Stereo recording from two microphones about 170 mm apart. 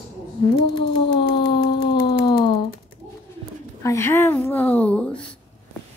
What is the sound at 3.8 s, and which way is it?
A woman's voice, 15° left (ahead or behind).